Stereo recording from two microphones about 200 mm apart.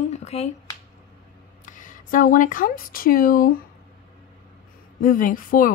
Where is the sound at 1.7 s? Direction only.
40° left (ahead or behind).